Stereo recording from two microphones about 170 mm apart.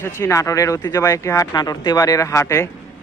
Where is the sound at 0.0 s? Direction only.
15° left (ahead or behind).